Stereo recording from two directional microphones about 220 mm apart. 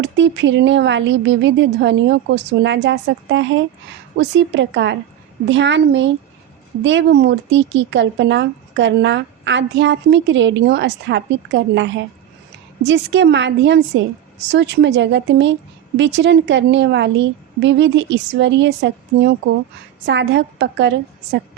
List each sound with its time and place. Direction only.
0.0 s a woman's voice: 55° right (ahead or behind)